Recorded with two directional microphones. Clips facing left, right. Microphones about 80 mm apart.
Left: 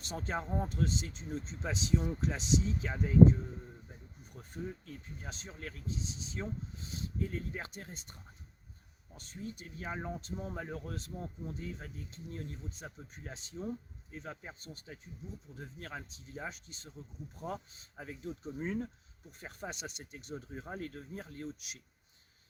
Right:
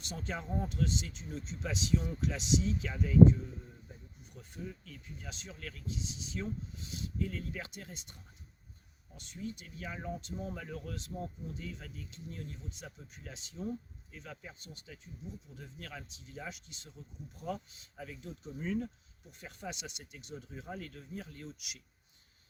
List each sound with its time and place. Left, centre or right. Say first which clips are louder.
0.0 s speech: left 3 dB; left
4.4 s speech: left 3 dB; left